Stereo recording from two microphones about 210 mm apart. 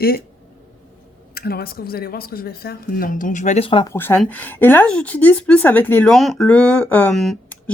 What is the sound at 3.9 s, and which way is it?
Speech, 10° left (ahead or behind).